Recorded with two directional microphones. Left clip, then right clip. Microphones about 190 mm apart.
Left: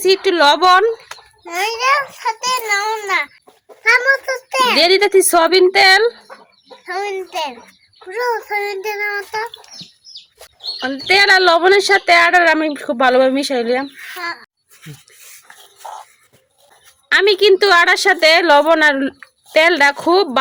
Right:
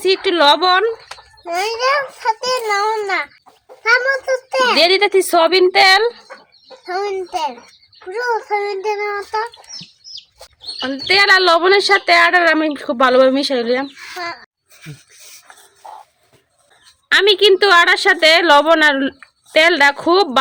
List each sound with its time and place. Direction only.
0.0 s speech: 5° left (ahead or behind)
1.5 s a child's voice: 50° right (ahead or behind)
4.8 s speech: 5° left (ahead or behind)
6.8 s a child's voice: 55° right (ahead or behind)
10.8 s speech: 5° right (ahead or behind)
14.2 s speech: 45° right (ahead or behind)
17.1 s speech: centre (ahead or behind)